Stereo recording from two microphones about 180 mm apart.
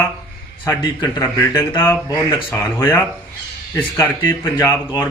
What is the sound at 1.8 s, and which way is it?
A man's voice, 15° left (ahead or behind).